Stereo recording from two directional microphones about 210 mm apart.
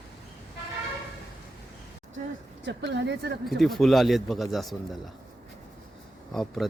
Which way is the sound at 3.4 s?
Centre (ahead or behind).